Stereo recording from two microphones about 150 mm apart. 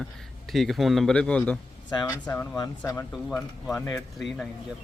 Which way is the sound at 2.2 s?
15° left (ahead or behind).